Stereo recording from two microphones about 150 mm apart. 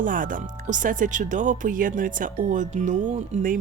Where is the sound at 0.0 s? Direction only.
65° right (ahead or behind).